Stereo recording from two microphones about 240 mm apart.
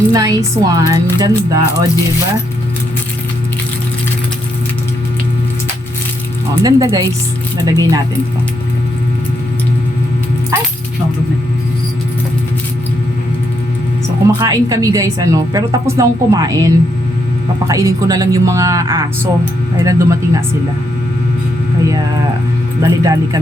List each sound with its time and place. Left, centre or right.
0.1 s a woman's voice: centre
6.6 s a woman's voice: centre
10.5 s dog: centre
14.3 s a woman's voice: centre
22.8 s a woman's voice: centre